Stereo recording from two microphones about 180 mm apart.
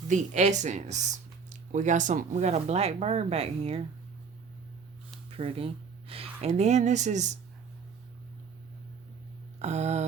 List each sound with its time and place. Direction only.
0.1 s speech: 40° right (ahead or behind)
5.4 s speech: 30° right (ahead or behind)
6.1 s a sound: 30° right (ahead or behind)
6.6 s speech: 40° right (ahead or behind)
9.6 s speech: 40° right (ahead or behind)